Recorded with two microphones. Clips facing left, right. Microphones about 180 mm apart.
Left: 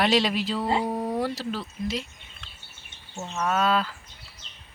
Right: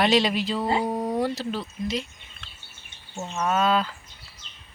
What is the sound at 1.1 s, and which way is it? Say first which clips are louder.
Speech: right 2 dB; 5° left (ahead or behind).